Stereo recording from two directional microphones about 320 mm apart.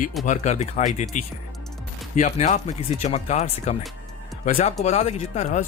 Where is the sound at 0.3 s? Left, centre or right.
Left.